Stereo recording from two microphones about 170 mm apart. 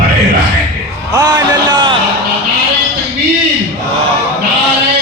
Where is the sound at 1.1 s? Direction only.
20° right (ahead or behind).